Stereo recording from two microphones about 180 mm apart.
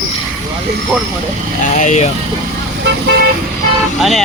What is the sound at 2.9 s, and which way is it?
Car, 70° right (ahead or behind).